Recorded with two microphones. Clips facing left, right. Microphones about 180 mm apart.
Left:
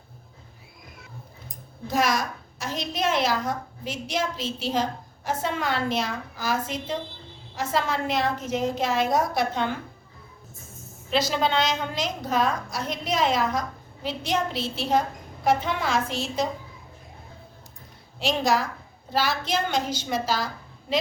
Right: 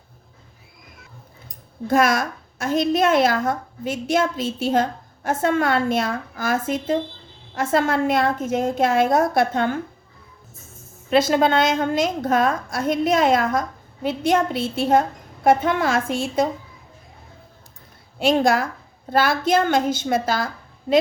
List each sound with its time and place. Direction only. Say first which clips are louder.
1.9 s a woman's voice: right 6 dB; 50° right (ahead or behind)
11.1 s a woman's voice: right 7 dB; 50° right (ahead or behind)
18.2 s a woman's voice: right 6 dB; 50° right (ahead or behind)